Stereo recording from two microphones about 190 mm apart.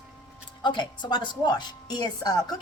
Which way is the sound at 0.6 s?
25° left (ahead or behind).